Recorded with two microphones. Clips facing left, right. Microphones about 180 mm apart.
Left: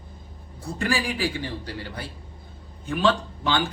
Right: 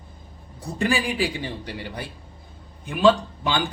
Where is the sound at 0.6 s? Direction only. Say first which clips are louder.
Right 2 dB; 20° right (ahead or behind).